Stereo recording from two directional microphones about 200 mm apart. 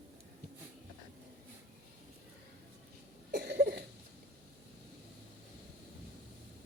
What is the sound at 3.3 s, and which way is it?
Cough, 55° right (ahead or behind).